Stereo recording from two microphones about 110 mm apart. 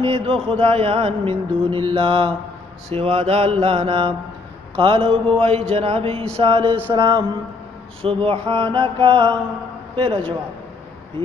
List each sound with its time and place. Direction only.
0.0 s speech: 60° right (ahead or behind)
2.9 s speech: 65° right (ahead or behind)
6.9 s mantra: 45° right (ahead or behind)
8.0 s mantra: 55° right (ahead or behind)